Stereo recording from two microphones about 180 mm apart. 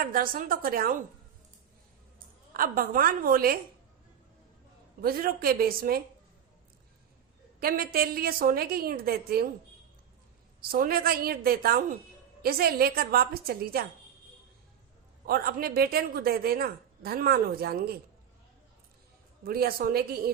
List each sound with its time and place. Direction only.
0.0 s a woman's voice: 50° right (ahead or behind)
2.5 s a woman's voice: 55° right (ahead or behind)
4.9 s a woman's voice: 55° right (ahead or behind)
7.6 s a woman's voice: 55° right (ahead or behind)
10.7 s a woman's voice: 55° right (ahead or behind)
15.3 s a woman's voice: 55° right (ahead or behind)
19.5 s a woman's voice: 55° right (ahead or behind)